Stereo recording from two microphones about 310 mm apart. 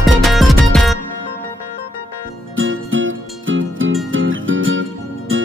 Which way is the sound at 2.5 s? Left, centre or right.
Right.